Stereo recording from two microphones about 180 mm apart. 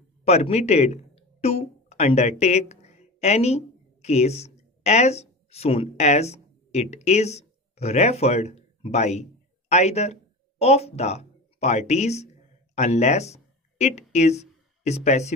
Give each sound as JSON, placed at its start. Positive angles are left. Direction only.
{"t": 0.2, "sound": "speech", "side_deg": 35}